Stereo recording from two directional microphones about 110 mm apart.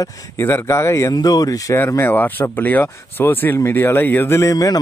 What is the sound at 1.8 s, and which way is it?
Speech, 20° left (ahead or behind).